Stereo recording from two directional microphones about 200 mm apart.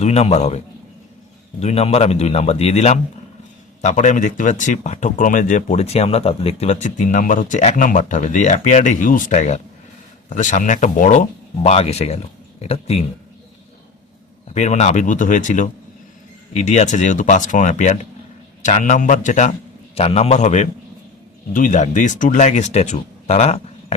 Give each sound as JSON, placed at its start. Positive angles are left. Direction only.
{"t": 0.0, "sound": "speech", "side_deg": 30}
{"t": 14.5, "sound": "speech", "side_deg": 35}